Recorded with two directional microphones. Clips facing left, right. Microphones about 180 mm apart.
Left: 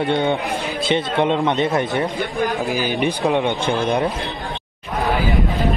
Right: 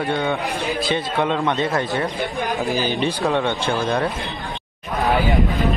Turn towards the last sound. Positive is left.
turn(degrees=20)  # may be behind; listen again after turning